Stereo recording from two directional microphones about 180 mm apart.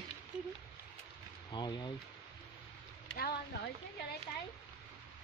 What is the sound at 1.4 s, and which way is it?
Speech, 25° left (ahead or behind).